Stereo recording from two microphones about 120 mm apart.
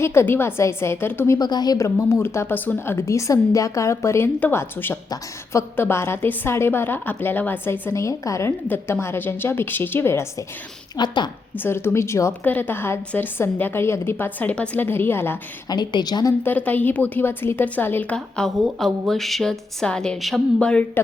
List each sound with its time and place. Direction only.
0.0 s a woman's voice: 20° left (ahead or behind)
1.4 s a woman's voice: 35° left (ahead or behind)
10.9 s a woman's voice: 40° left (ahead or behind)
11.5 s a woman's voice: 20° left (ahead or behind)
15.7 s a woman's voice: 35° left (ahead or behind)
16.4 s a woman's voice: 15° left (ahead or behind)
18.3 s a woman's voice: centre (ahead or behind)